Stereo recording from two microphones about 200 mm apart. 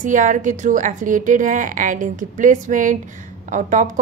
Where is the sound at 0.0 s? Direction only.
40° right (ahead or behind).